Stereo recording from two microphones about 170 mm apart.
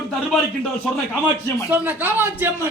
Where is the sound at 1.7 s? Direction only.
10° right (ahead or behind).